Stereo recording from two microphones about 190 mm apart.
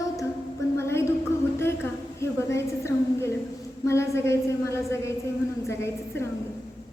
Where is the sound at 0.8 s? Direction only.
15° left (ahead or behind).